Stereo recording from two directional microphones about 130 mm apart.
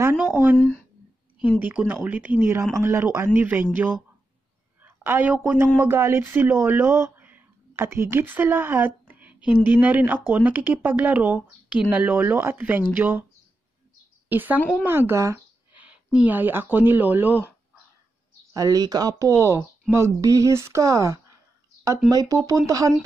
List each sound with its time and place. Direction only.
0.0 s speech: 15° right (ahead or behind)
0.6 s speech: 15° left (ahead or behind)
1.6 s speech: 15° right (ahead or behind)
14.3 s speech: 15° right (ahead or behind)
15.7 s speech: 10° right (ahead or behind)
18.5 s speech: 30° right (ahead or behind)